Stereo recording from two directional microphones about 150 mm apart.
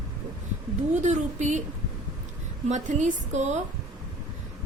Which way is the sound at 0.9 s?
55° right (ahead or behind).